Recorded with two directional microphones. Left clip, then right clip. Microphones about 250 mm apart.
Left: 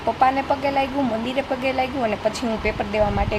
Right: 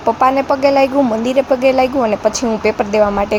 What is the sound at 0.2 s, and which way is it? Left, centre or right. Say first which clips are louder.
A woman's voice: right 5 dB; right.